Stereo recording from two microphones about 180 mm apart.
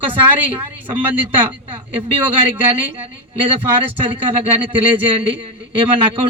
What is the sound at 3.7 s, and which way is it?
A man's voice, 30° right (ahead or behind).